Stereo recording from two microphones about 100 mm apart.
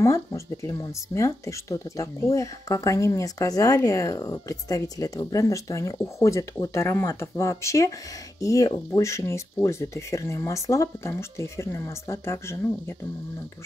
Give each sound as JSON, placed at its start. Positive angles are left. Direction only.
{"t": 0.0, "sound": "speech", "side_deg": 30}